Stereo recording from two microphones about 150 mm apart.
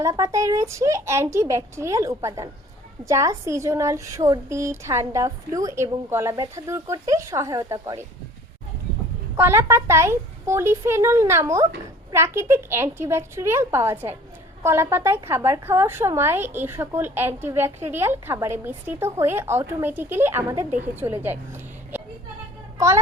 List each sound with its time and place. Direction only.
0.0 s a woman's voice: 20° right (ahead or behind)
9.3 s a woman's voice: 15° right (ahead or behind)